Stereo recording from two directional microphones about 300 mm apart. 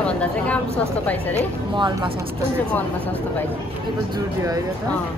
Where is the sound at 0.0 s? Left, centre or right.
Centre.